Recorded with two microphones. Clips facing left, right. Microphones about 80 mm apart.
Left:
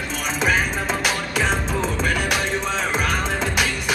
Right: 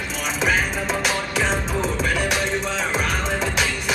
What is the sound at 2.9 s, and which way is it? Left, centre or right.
Music, centre.